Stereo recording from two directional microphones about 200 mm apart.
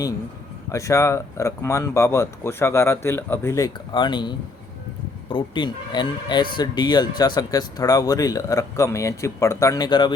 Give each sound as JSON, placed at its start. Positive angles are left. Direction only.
{"t": 0.7, "sound": "speech", "side_deg": 15}